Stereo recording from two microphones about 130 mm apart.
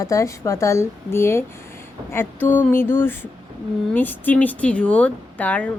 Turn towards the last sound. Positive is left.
turn(degrees=10)  # may be behind; listen again after turning